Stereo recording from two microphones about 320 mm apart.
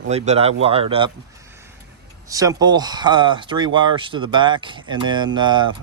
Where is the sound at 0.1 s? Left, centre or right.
Centre.